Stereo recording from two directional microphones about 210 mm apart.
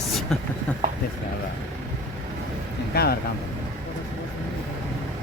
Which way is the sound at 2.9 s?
50° left (ahead or behind).